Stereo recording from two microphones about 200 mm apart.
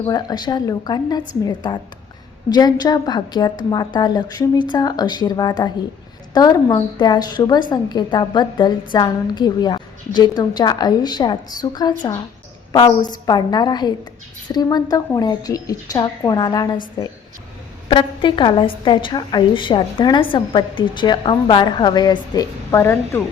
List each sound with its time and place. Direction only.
0.1 s a woman's voice: 20° left (ahead or behind)
17.8 s a woman's voice: 25° left (ahead or behind)